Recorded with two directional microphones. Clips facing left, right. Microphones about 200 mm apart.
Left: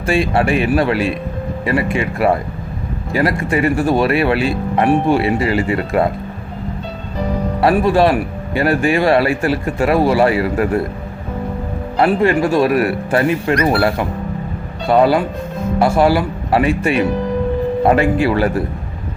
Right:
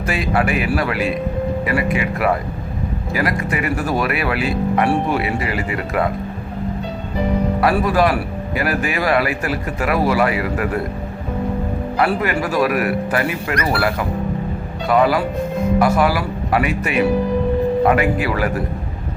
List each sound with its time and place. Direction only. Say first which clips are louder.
0.0 s speech: left 4 dB; 30° left (ahead or behind)
7.6 s speech: left 5 dB; 25° left (ahead or behind)
11.9 s speech: left 6 dB; 25° left (ahead or behind)